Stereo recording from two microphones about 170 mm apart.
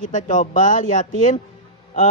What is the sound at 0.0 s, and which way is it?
Speech, 50° left (ahead or behind).